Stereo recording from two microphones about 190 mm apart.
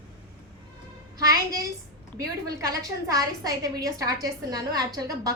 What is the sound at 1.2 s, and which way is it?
A woman's voice, 20° right (ahead or behind).